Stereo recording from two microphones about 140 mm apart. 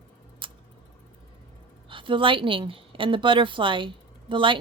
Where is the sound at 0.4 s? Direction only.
35° right (ahead or behind).